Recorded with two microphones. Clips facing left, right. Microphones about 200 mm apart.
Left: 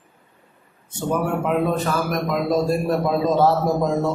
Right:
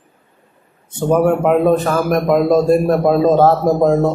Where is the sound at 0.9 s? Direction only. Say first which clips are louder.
Right 9 dB; 55° right (ahead or behind).